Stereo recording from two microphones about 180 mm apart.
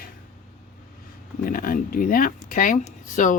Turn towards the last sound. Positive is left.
turn(degrees=45)  # may be behind; listen again after turning